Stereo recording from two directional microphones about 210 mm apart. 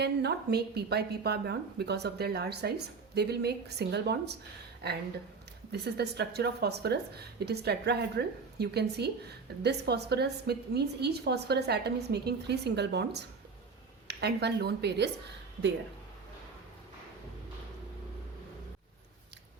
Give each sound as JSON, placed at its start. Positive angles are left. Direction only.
{"t": 0.0, "sound": "a woman's voice", "side_deg": -50}
{"t": 5.7, "sound": "a woman's voice", "side_deg": -50}